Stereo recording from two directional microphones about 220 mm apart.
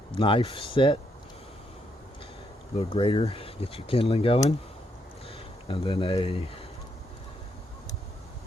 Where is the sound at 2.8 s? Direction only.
25° left (ahead or behind).